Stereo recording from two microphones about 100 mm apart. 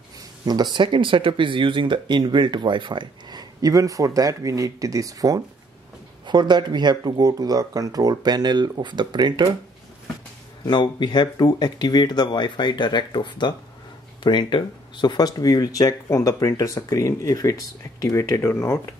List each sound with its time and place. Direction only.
0.5 s speech: 45° right (ahead or behind)
6.2 s speech: 50° right (ahead or behind)
10.6 s speech: 50° left (ahead or behind)
18.4 s speech: 25° left (ahead or behind)